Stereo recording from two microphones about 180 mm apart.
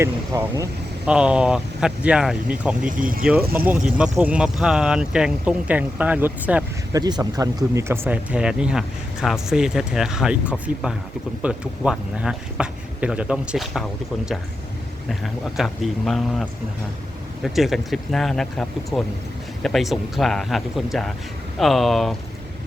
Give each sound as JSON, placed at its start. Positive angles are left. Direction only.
{"t": 0.0, "sound": "speech", "side_deg": -15}
{"t": 3.0, "sound": "speech", "side_deg": -50}
{"t": 3.2, "sound": "speech", "side_deg": -10}
{"t": 6.9, "sound": "speech", "side_deg": -20}